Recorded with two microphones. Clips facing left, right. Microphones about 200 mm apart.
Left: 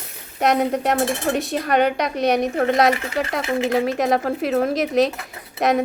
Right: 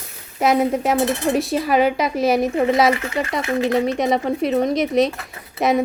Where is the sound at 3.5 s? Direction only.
25° left (ahead or behind).